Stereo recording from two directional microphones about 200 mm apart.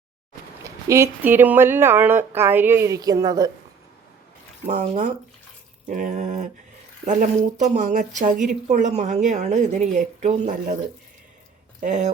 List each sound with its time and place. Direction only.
0.6 s speech: 15° right (ahead or behind)
4.6 s a woman's voice: 40° right (ahead or behind)
11.8 s a woman's voice: 35° right (ahead or behind)